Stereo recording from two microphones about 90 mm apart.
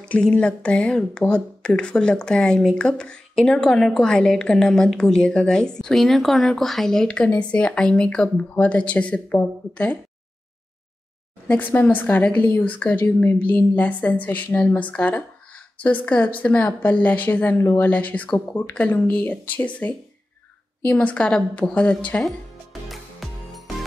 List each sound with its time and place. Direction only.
0.0 s speech: 15° left (ahead or behind)
11.4 s a woman's voice: 20° left (ahead or behind)
22.2 s music: centre (ahead or behind)